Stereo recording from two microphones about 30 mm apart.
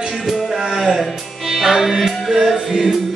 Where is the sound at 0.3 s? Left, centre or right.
Centre.